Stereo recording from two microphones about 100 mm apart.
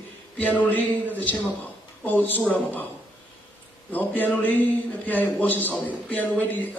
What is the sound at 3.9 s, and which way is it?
A man's voice, 15° left (ahead or behind).